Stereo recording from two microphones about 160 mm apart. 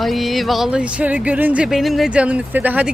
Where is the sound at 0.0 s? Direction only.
Centre (ahead or behind).